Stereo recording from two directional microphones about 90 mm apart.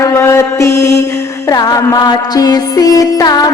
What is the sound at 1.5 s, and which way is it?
Music, 45° left (ahead or behind).